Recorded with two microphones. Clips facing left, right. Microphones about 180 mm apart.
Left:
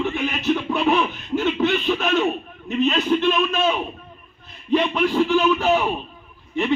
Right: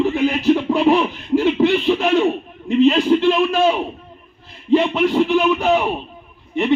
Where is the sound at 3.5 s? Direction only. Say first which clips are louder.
Right 5 dB; 10° right (ahead or behind).